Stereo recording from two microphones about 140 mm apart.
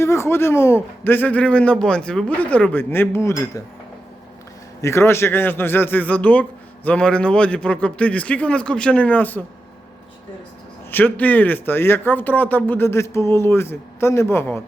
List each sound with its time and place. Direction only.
0.0 s speech: 20° left (ahead or behind)
4.8 s speech: 20° left (ahead or behind)
10.9 s speech: 10° left (ahead or behind)